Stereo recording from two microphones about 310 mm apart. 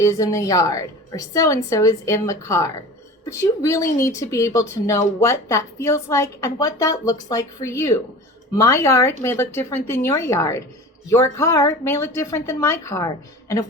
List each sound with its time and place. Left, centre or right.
0.0 s speech: centre